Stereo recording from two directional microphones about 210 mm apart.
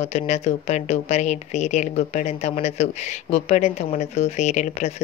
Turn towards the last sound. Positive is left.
turn(degrees=35)  # may be behind; listen again after turning